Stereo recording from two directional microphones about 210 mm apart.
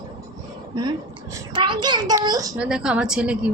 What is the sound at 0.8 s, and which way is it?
A child's voice, 20° right (ahead or behind).